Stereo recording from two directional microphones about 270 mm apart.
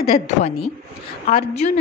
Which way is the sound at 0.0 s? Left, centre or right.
Left.